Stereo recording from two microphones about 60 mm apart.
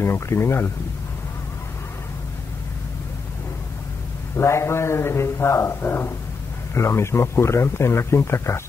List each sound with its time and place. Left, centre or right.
0.0 s a man's voice: left
4.4 s a man's voice: left